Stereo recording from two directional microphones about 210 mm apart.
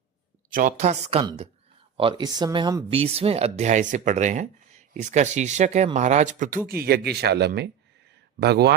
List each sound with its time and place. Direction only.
0.5 s speech: 35° right (ahead or behind)
6.7 s speech: 45° right (ahead or behind)